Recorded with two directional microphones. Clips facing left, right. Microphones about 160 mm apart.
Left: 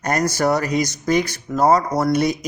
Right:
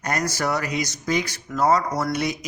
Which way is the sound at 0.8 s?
50° left (ahead or behind).